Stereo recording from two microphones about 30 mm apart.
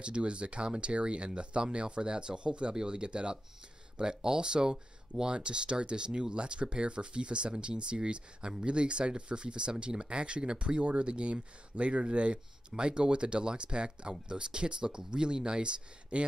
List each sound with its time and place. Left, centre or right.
0.0 s speech: right